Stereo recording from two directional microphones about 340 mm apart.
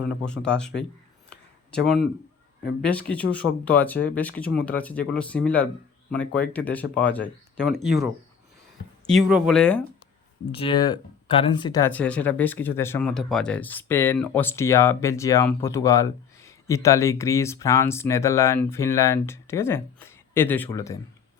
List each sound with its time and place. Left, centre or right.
0.2 s speech: centre
1.7 s speech: centre
9.0 s speech: centre
10.5 s speech: centre